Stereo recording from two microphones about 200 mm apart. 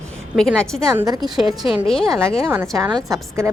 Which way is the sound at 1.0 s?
20° right (ahead or behind).